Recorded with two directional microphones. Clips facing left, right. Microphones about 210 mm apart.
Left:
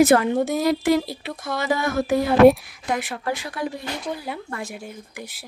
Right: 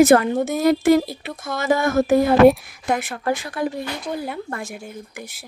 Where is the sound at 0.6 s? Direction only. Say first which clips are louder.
Right 8 dB; 50° right (ahead or behind).